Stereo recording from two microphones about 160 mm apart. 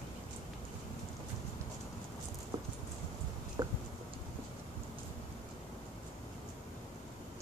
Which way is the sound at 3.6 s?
20° right (ahead or behind).